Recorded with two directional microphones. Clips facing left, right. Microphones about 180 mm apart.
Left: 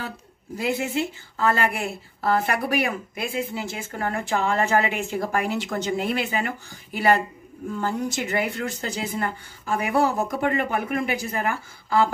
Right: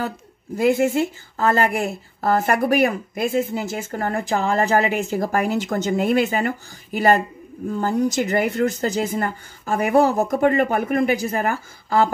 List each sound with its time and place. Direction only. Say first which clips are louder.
0.6 s a woman's voice: right 7 dB; 50° right (ahead or behind)